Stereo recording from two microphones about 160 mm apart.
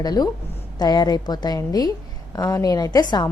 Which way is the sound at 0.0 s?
25° left (ahead or behind).